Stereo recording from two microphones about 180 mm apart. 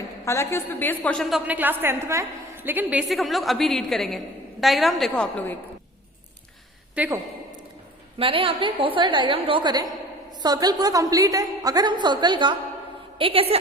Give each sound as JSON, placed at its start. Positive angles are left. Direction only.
{"t": 0.3, "sound": "a woman's voice", "side_deg": 15}
{"t": 1.5, "sound": "a woman's voice", "side_deg": -10}
{"t": 6.9, "sound": "a woman's voice", "side_deg": -10}
{"t": 8.2, "sound": "a woman's voice", "side_deg": -30}